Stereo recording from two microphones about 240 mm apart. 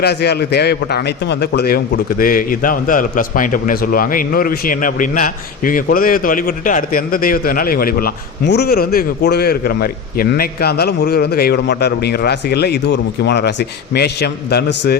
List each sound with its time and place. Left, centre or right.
0.0 s a man's voice: left